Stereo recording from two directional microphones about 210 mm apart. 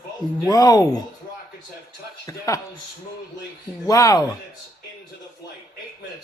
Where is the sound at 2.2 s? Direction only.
15° left (ahead or behind).